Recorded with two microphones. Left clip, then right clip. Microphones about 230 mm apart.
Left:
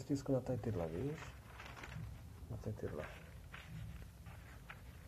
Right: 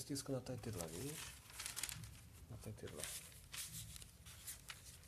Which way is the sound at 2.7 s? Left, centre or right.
Right.